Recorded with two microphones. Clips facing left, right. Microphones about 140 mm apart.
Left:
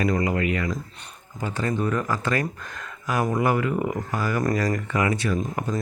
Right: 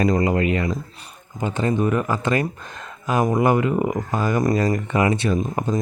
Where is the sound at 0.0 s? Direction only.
35° right (ahead or behind).